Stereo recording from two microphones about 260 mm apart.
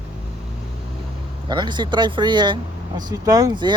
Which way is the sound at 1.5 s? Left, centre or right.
Centre.